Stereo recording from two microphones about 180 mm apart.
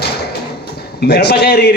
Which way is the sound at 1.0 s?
65° left (ahead or behind).